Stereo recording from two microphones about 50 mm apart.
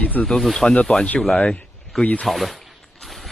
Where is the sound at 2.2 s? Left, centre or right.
Centre.